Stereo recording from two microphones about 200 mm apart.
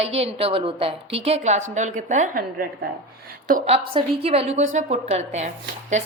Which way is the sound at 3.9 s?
30° right (ahead or behind).